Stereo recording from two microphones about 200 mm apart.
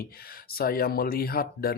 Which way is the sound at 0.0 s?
50° left (ahead or behind).